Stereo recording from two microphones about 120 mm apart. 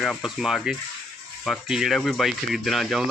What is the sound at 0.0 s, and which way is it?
A man's voice, centre (ahead or behind).